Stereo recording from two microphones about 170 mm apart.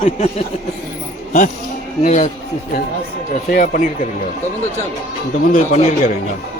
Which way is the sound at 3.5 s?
50° left (ahead or behind).